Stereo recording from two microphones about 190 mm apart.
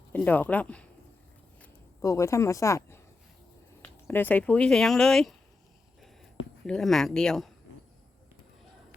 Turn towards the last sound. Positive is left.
turn(degrees=0)  # may be behind; listen again after turning